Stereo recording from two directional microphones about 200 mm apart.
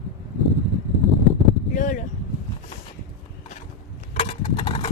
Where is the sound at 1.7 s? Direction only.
40° left (ahead or behind).